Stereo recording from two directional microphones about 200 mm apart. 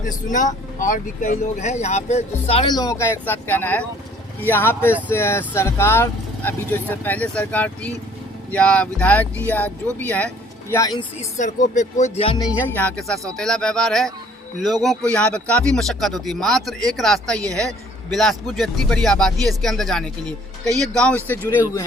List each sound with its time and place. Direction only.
0.0 s speech: 40° left (ahead or behind); by 11.0 s 15° left (ahead or behind)
11.2 s speech: 35° left (ahead or behind)
12.5 s a man's voice: 10° left (ahead or behind)
17.4 s a woman's voice: 15° right (ahead or behind)
17.7 s a man's voice: centre (ahead or behind)